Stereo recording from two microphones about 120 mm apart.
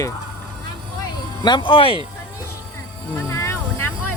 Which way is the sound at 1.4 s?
40° left (ahead or behind).